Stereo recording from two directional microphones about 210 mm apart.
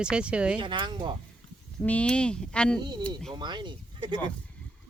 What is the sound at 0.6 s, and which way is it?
Speech, 20° right (ahead or behind).